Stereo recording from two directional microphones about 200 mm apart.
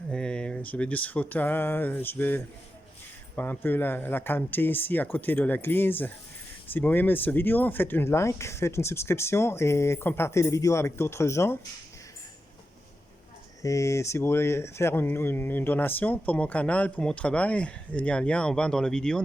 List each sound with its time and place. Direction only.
0.1 s speech: 5° left (ahead or behind)
13.6 s speech: 15° left (ahead or behind)